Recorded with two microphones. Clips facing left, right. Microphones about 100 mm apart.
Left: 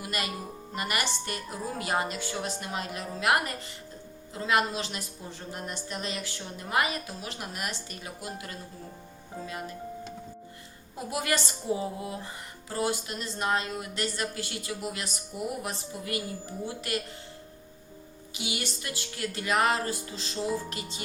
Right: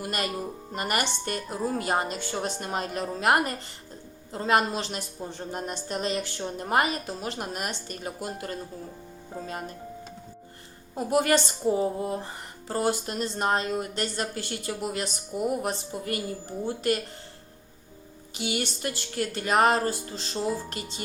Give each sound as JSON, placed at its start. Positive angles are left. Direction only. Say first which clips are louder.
{"t": 0.0, "sound": "speech", "louder": "right 4 dB", "side_deg": -40}
{"t": 10.9, "sound": "speech", "louder": "right 7 dB", "side_deg": -45}
{"t": 18.3, "sound": "speech", "louder": "right 5 dB", "side_deg": -40}